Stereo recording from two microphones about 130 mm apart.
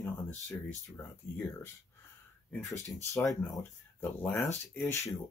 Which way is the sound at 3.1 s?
25° left (ahead or behind).